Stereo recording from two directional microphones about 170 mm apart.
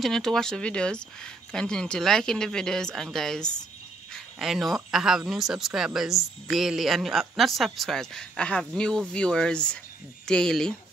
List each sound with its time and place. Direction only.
0.0 s speech: centre (ahead or behind)